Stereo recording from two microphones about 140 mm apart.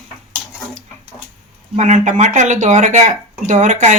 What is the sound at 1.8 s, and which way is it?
Speech, 55° right (ahead or behind).